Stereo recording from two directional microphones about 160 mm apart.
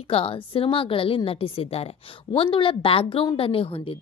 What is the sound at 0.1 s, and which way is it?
A woman's voice, 35° left (ahead or behind).